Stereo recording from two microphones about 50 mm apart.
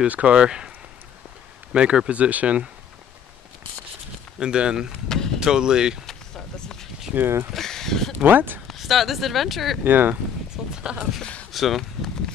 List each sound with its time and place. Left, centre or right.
0.0 s speech: right
1.7 s speech: centre
4.4 s speech: centre
5.0 s vehicle: centre
5.4 s speech: centre
6.0 s a sound: centre
7.2 s speech: right
7.5 s speech: centre
8.2 s speech: right
8.6 s speech: centre
9.8 s speech: right
10.5 s a sound: centre
11.5 s a sound: centre